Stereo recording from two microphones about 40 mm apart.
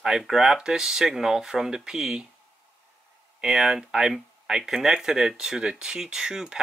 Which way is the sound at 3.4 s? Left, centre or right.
Centre.